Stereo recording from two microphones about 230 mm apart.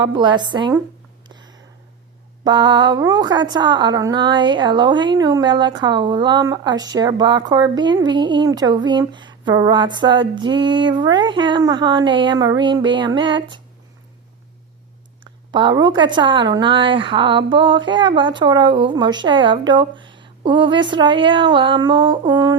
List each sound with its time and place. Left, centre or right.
0.1 s a woman's voice: centre
2.4 s a woman's voice: centre
15.5 s a woman's voice: centre